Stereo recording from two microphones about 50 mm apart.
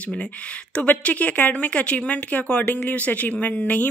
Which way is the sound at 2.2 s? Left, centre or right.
Left.